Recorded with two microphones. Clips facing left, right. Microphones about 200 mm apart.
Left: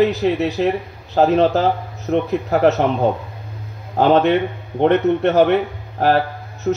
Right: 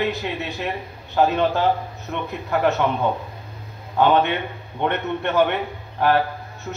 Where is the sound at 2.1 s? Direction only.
35° left (ahead or behind).